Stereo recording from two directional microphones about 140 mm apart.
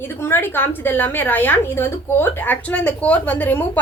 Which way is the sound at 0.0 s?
15° left (ahead or behind).